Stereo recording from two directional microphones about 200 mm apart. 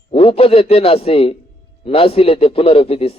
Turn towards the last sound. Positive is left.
turn(degrees=30)  # may be behind; listen again after turning